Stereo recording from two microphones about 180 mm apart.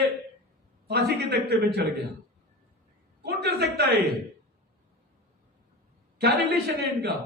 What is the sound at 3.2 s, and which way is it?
Speech, 60° right (ahead or behind).